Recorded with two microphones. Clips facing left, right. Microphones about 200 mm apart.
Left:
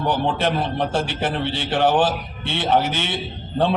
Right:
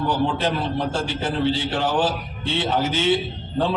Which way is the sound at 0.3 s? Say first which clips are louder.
Left 2 dB; 65° left (ahead or behind).